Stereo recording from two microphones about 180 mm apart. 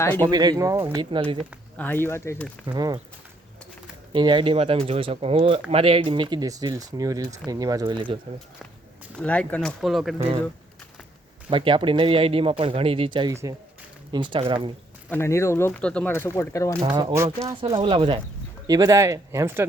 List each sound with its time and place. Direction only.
0.2 s speech: 20° right (ahead or behind)
1.1 s speech: 30° right (ahead or behind)
1.4 s speech: 10° left (ahead or behind)
2.7 s speech: 20° right (ahead or behind)
4.1 s speech: 25° right (ahead or behind)
9.1 s speech: 5° left (ahead or behind)
10.2 s speech: 30° right (ahead or behind)
11.4 s speech: 30° right (ahead or behind)
15.1 s speech: 15° left (ahead or behind)
16.8 s speech: 25° right (ahead or behind)
18.7 s speech: 20° right (ahead or behind)